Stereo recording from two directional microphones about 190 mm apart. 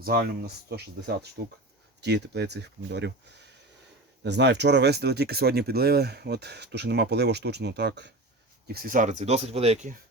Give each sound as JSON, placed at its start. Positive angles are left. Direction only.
{"t": 0.0, "sound": "speech", "side_deg": -55}
{"t": 8.6, "sound": "speech", "side_deg": -50}